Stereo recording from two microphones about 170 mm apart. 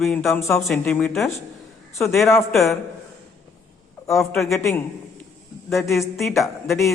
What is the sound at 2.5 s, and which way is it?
Speech, centre (ahead or behind).